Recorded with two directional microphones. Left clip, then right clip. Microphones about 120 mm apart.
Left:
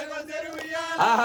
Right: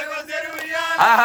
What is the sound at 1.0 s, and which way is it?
Music, centre (ahead or behind).